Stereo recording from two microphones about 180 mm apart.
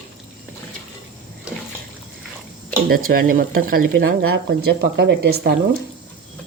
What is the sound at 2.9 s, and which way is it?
A woman's voice, 55° right (ahead or behind).